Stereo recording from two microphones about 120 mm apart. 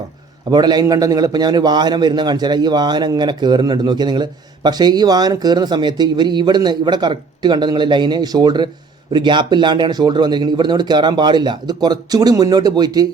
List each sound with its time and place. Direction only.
0.5 s a man's voice: 35° right (ahead or behind)